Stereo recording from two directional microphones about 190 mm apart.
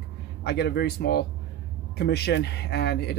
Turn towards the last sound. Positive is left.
turn(degrees=60)  # may be behind; listen again after turning